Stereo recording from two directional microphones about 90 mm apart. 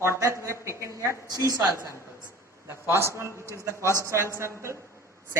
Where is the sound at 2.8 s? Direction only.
30° right (ahead or behind).